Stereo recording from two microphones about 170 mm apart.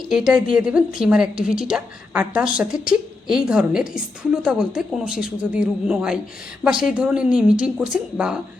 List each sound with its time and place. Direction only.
0.1 s a woman's voice: 5° right (ahead or behind)